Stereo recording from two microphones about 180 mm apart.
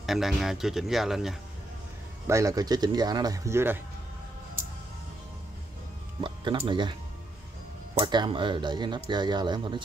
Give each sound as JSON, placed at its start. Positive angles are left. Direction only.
{"t": 0.0, "sound": "speech", "side_deg": 0}
{"t": 2.2, "sound": "speech", "side_deg": -15}
{"t": 6.2, "sound": "speech", "side_deg": -25}
{"t": 8.0, "sound": "speech", "side_deg": -25}